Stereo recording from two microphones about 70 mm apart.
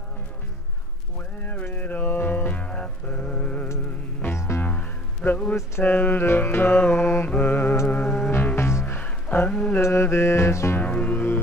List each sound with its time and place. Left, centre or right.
1.4 s music: left
4.3 s music: left
4.6 s music: left
5.9 s mantra: left
7.9 s music: left
8.5 s music: left
9.5 s mantra: left
9.8 s music: left
10.8 s music: centre